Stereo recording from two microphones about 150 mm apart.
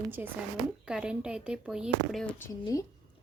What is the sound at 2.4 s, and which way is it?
Speech, 20° left (ahead or behind).